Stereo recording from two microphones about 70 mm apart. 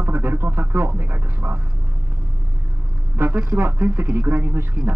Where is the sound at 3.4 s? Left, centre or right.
Right.